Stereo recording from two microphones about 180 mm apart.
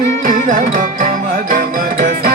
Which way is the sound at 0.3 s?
45° right (ahead or behind).